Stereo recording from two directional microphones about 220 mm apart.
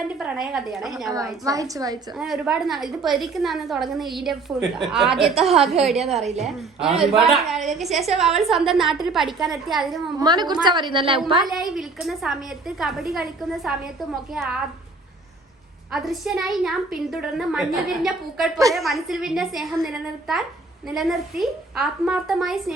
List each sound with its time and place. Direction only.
0.1 s a woman's voice: 5° right (ahead or behind)
1.0 s a woman's voice: 15° right (ahead or behind)
2.1 s a woman's voice: centre (ahead or behind)
10.2 s a woman's voice: 20° right (ahead or behind)
11.4 s a woman's voice: centre (ahead or behind)
15.9 s a woman's voice: centre (ahead or behind)